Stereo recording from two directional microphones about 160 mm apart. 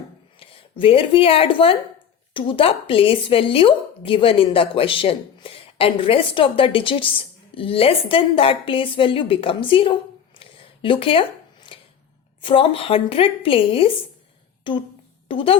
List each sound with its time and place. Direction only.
0.3 s speech: 35° left (ahead or behind)